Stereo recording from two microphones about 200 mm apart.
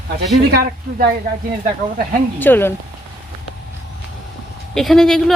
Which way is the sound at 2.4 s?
10° left (ahead or behind).